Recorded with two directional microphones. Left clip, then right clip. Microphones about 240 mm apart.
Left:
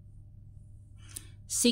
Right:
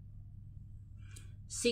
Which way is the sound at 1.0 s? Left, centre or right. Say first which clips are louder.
Left 10 dB; left.